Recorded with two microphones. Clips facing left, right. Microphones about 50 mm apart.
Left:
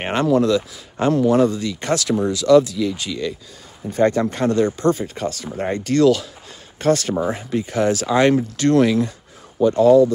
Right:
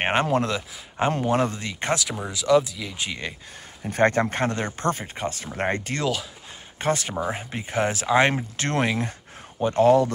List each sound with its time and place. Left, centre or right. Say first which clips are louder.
0.0 s speech: left 4 dB; right
0.6 s speech: left 4 dB; right
1.1 s speech: left 11 dB; right
2.0 s speech: left 10 dB; centre
3.1 s speech: left 7 dB; right
5.1 s speech: left 4 dB; right